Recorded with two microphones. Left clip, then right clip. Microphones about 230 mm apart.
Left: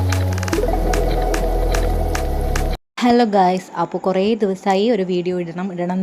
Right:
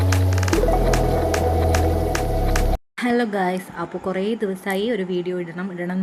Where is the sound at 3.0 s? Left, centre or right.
Left.